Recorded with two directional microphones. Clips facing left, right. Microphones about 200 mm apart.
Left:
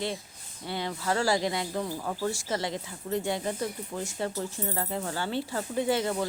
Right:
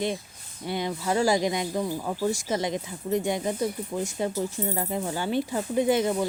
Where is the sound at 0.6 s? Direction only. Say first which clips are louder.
Right 4 dB; 15° right (ahead or behind).